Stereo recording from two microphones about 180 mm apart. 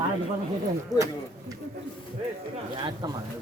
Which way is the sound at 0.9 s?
20° right (ahead or behind).